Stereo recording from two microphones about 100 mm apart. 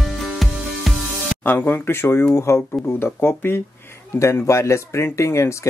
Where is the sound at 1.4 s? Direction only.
20° left (ahead or behind).